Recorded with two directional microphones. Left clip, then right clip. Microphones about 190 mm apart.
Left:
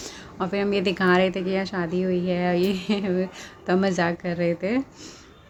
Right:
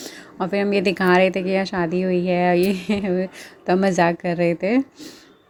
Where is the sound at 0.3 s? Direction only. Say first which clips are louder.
Right 4 dB; 25° right (ahead or behind).